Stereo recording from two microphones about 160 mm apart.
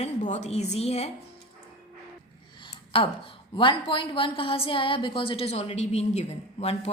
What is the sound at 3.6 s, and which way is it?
A woman's voice, 30° left (ahead or behind).